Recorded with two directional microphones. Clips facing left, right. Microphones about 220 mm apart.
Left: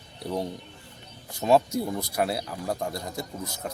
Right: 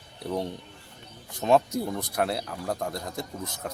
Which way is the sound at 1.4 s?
5° left (ahead or behind).